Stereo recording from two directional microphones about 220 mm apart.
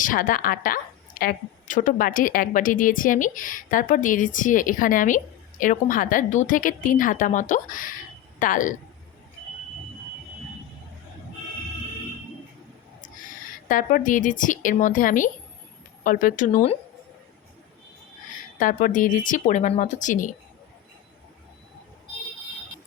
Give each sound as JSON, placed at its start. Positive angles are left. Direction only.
{"t": 0.0, "sound": "a woman's voice", "side_deg": 40}
{"t": 13.7, "sound": "a woman's voice", "side_deg": 35}
{"t": 18.6, "sound": "a woman's voice", "side_deg": 35}